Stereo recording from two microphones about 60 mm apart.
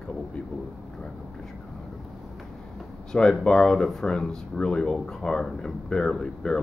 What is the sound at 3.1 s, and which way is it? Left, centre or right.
Speech, centre.